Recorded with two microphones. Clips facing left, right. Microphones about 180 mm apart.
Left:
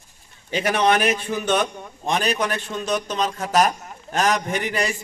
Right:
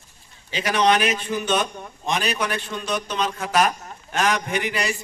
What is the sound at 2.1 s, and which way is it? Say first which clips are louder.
A man's voice: left 2 dB; 45° left (ahead or behind).